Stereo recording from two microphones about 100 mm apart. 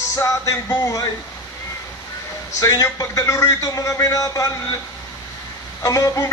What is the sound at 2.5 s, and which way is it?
A man's voice, 30° left (ahead or behind).